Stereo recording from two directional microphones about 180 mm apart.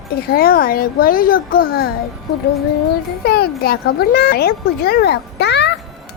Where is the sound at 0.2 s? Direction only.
55° left (ahead or behind).